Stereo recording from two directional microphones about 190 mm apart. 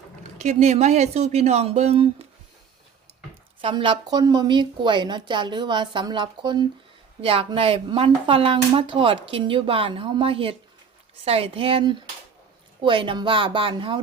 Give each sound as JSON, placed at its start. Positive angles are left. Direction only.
{"t": 0.2, "sound": "speech", "side_deg": -35}
{"t": 3.6, "sound": "speech", "side_deg": -25}